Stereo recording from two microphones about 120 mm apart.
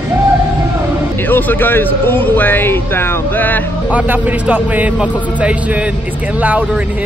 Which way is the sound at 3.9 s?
15° right (ahead or behind).